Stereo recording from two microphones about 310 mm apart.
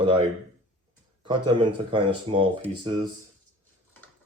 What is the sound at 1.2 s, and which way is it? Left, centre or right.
Speech, centre.